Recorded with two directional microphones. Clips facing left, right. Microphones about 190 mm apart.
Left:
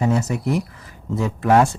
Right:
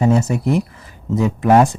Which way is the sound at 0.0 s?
25° right (ahead or behind).